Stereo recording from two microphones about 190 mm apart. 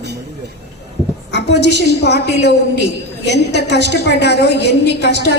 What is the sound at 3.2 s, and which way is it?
A woman's voice, 60° left (ahead or behind).